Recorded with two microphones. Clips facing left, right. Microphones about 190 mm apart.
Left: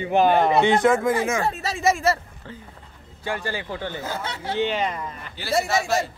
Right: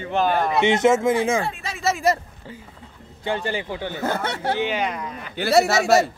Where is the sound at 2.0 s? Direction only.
15° right (ahead or behind).